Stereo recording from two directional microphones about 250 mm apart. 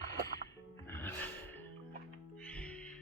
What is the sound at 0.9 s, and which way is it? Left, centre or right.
Music, centre.